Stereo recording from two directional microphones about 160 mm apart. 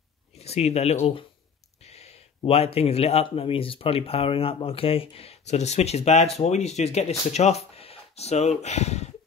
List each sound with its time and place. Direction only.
0.4 s speech: 40° left (ahead or behind)